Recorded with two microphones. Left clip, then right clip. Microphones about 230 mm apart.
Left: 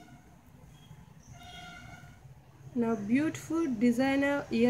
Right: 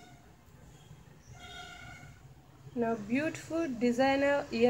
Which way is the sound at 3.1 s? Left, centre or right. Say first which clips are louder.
Left 2 dB; left.